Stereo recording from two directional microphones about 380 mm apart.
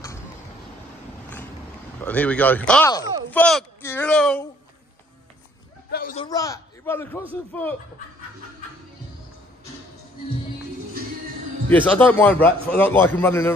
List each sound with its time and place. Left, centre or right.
2.0 s a man's voice: centre
5.9 s speech: left
6.2 s a man's voice: centre
11.7 s a man's voice: centre